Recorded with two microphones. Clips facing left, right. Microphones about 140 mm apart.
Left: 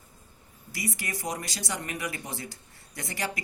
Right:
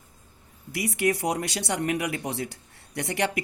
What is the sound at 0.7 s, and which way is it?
Speech, 65° right (ahead or behind).